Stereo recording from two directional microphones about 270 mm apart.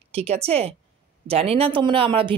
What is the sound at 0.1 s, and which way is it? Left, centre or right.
Speech, right.